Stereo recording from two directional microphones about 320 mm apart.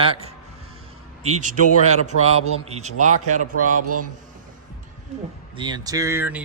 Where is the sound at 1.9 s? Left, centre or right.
Right.